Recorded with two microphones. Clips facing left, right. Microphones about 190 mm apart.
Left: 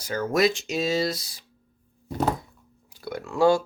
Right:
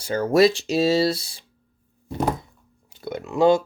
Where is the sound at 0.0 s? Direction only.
30° right (ahead or behind).